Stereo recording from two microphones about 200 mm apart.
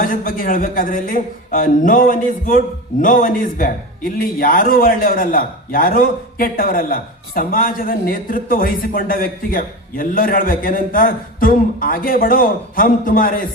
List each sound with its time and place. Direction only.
0.0 s a man's voice: 40° left (ahead or behind)